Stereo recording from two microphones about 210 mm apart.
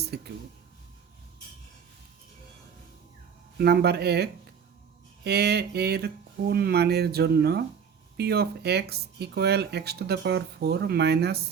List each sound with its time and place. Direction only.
0.1 s speech: 50° right (ahead or behind)
3.6 s speech: 50° right (ahead or behind)